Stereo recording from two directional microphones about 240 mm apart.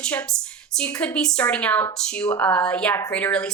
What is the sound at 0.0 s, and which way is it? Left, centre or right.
Speech, centre.